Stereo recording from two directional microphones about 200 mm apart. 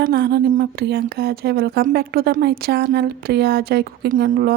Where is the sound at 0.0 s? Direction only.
50° right (ahead or behind).